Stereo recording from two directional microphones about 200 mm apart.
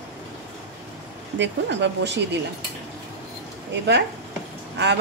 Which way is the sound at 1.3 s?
60° right (ahead or behind).